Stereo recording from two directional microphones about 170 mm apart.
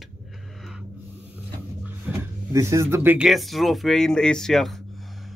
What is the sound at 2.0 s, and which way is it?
Speech, 15° right (ahead or behind).